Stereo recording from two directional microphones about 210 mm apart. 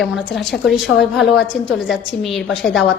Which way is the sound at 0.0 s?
Centre (ahead or behind).